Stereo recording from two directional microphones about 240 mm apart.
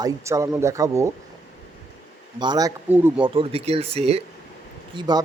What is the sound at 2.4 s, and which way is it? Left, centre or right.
Speech, centre.